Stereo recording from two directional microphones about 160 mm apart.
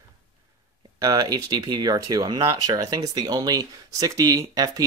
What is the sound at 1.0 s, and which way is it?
Speech, 20° right (ahead or behind).